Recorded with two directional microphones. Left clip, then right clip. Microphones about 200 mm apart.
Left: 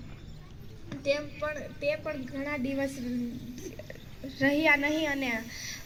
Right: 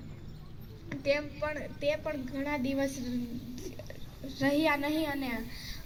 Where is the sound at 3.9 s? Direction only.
40° left (ahead or behind).